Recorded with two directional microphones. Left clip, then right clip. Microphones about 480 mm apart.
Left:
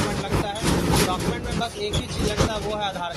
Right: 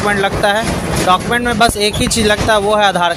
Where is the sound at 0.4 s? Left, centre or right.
Centre.